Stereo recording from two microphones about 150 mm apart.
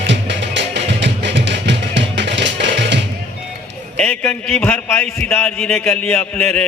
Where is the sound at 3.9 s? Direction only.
10° left (ahead or behind).